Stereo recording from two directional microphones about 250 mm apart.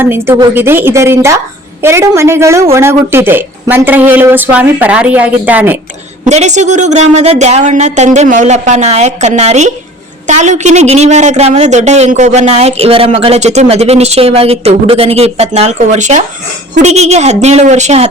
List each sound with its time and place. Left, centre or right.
0.0 s a woman's voice: centre
6.2 s a woman's voice: right